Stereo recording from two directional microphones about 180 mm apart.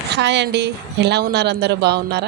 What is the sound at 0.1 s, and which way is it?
A woman's voice, 75° right (ahead or behind).